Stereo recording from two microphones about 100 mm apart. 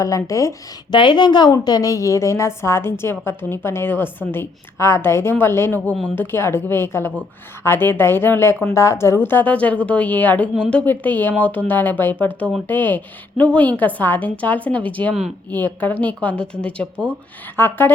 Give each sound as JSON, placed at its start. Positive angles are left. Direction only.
{"t": 0.0, "sound": "a woman's voice", "side_deg": 30}
{"t": 0.9, "sound": "a woman's voice", "side_deg": 50}